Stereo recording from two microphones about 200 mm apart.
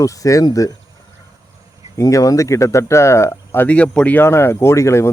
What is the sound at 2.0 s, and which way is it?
Speech, 15° left (ahead or behind).